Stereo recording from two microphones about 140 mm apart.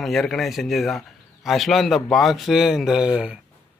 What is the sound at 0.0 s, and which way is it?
A man's voice, centre (ahead or behind).